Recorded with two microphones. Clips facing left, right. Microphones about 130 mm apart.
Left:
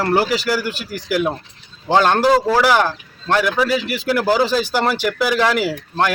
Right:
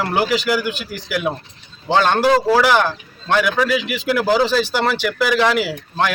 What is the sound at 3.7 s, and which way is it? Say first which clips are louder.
Speech: even; 40° left (ahead or behind).